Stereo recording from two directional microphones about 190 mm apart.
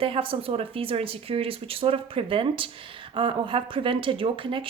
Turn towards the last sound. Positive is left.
turn(degrees=-25)  # may be behind; listen again after turning